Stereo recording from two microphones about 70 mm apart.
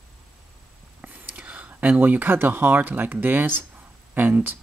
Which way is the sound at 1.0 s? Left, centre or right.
Right.